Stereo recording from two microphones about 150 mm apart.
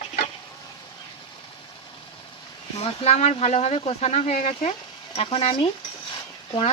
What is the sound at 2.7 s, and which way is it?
Speech, 45° left (ahead or behind).